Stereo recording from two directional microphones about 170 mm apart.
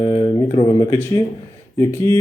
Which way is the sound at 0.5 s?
20° left (ahead or behind).